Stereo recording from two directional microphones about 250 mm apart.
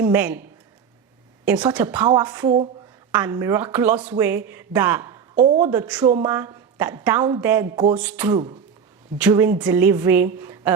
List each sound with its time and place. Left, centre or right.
0.1 s a woman's voice: centre
1.5 s a woman's voice: centre
2.1 s a woman's voice: centre
5.3 s a woman's voice: right
6.2 s a woman's voice: centre
10.4 s a sound: centre